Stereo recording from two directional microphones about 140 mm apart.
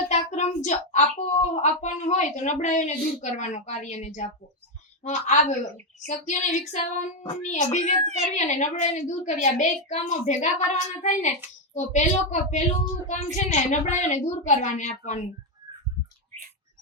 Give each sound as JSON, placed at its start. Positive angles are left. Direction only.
{"t": 0.1, "sound": "a child's voice", "side_deg": 55}